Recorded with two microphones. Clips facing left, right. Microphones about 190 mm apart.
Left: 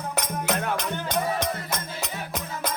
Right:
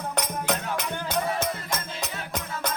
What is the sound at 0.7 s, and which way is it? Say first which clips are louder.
Music: left 1 dB; 5° right (ahead or behind).